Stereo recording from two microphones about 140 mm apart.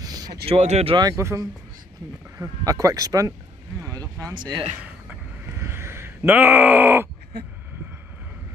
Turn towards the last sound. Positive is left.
turn(degrees=-15)  # may be behind; listen again after turning